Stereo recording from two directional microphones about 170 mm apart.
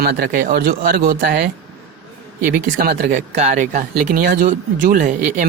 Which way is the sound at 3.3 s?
40° right (ahead or behind).